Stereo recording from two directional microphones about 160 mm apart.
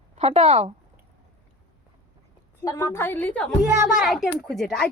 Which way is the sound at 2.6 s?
20° left (ahead or behind).